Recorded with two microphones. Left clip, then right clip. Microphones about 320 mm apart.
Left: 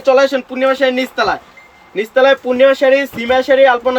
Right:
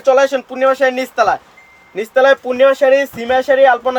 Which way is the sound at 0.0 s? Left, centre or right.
Right.